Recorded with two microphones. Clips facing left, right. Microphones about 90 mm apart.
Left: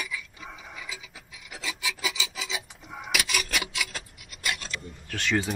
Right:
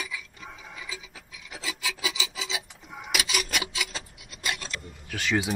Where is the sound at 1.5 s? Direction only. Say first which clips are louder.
Even; centre (ahead or behind).